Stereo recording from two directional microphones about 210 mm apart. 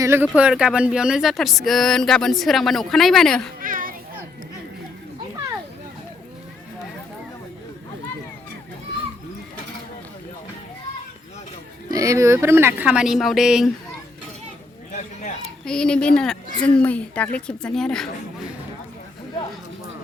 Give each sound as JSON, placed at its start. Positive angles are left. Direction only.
{"t": 0.0, "sound": "speech", "side_deg": -10}
{"t": 3.6, "sound": "children playing", "side_deg": -40}
{"t": 11.9, "sound": "speech", "side_deg": -15}
{"t": 15.6, "sound": "speech", "side_deg": 5}